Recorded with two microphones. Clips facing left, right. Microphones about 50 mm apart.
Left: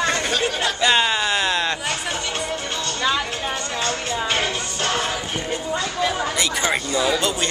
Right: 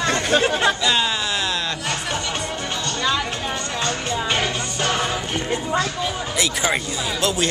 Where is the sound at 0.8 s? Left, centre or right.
Left.